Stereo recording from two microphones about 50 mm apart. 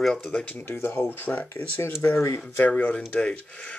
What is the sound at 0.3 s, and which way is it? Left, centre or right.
Speech, left.